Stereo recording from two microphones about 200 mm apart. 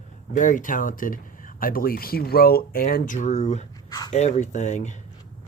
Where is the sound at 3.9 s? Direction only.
20° left (ahead or behind).